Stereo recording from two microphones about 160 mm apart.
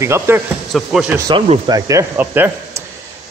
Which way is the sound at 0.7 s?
5° right (ahead or behind).